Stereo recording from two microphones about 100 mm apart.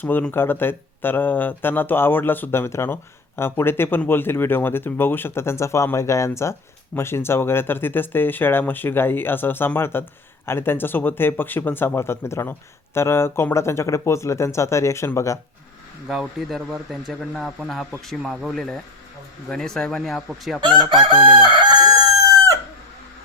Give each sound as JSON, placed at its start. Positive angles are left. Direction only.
{"t": 0.0, "sound": "speech", "side_deg": 20}
{"t": 16.0, "sound": "speech", "side_deg": 0}
{"t": 20.6, "sound": "chicken", "side_deg": -50}